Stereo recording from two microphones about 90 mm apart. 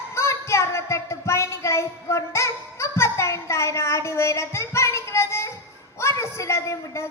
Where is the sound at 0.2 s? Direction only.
30° left (ahead or behind).